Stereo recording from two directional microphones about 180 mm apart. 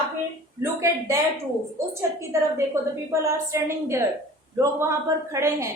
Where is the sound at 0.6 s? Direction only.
15° right (ahead or behind).